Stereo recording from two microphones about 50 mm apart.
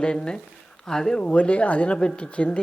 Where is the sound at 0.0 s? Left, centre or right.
Centre.